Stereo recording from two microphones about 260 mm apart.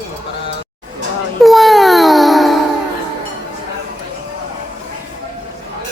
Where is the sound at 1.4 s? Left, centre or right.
Centre.